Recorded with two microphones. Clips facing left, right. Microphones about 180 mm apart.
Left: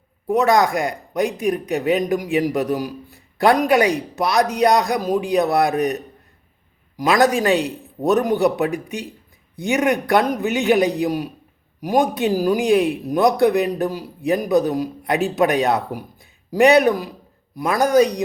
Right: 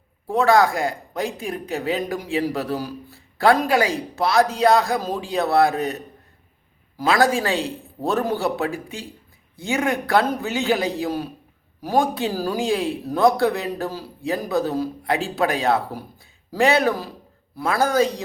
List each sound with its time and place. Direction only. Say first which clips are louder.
0.5 s a man's voice: even; 20° left (ahead or behind)